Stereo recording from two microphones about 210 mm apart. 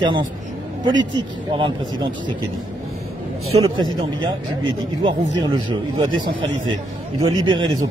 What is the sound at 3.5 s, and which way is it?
Speech, 25° right (ahead or behind).